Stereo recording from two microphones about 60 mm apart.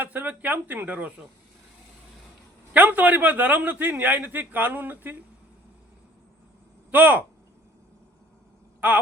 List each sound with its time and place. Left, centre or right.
0.0 s a man's voice: right
2.7 s a man's voice: right
6.9 s speech: right